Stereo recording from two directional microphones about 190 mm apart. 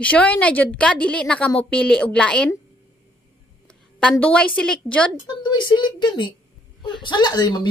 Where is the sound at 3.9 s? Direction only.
5° left (ahead or behind).